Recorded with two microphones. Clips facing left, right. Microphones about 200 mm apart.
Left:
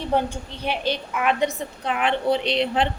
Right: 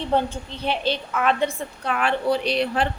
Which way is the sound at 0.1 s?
10° left (ahead or behind).